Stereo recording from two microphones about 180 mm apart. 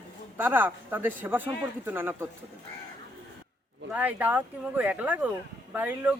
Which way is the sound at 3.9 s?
10° right (ahead or behind).